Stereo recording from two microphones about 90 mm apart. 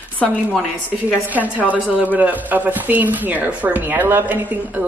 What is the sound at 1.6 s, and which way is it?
Speech, 15° right (ahead or behind).